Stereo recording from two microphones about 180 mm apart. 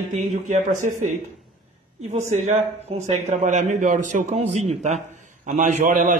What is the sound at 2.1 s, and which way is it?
A man's voice, 40° right (ahead or behind).